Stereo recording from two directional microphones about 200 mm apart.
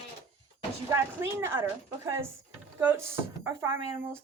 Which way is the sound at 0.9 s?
15° right (ahead or behind).